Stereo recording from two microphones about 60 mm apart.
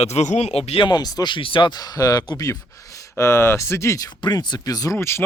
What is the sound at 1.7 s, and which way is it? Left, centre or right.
Speech, left.